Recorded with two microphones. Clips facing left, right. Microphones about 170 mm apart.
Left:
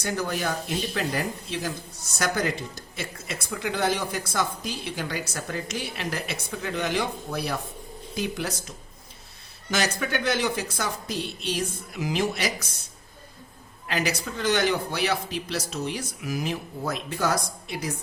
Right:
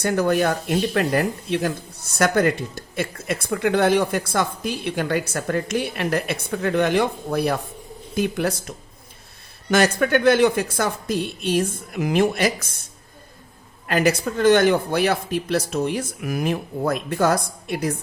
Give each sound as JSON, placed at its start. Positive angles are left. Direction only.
{"t": 0.0, "sound": "speech", "side_deg": -55}
{"t": 13.8, "sound": "speech", "side_deg": -50}